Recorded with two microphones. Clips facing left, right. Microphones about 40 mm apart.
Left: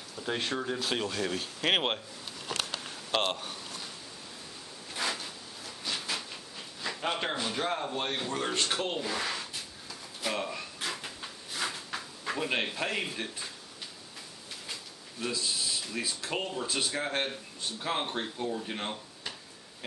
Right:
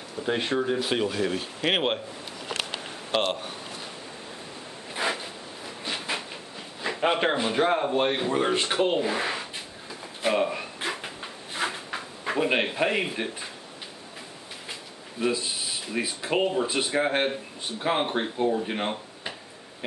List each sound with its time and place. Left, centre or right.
0.2 s speech: centre
2.4 s a sound: right
3.1 s speech: centre
4.9 s zipper: right
5.9 s a sound: right
6.8 s speech: right
10.2 s drawer open or close: right
14.7 s speech: right